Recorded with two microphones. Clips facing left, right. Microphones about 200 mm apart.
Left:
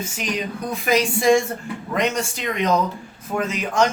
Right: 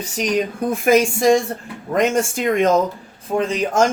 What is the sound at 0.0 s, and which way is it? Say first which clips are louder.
A man's voice: right 6 dB; 45° right (ahead or behind).